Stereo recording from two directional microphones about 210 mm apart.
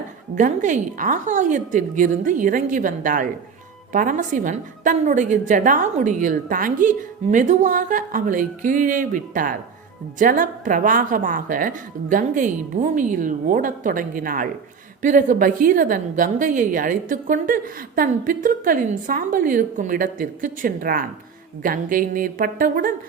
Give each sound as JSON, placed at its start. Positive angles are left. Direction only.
{"t": 0.3, "sound": "a woman's voice", "side_deg": -35}